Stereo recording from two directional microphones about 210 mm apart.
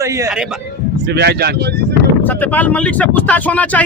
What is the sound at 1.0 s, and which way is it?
Speech, 50° right (ahead or behind).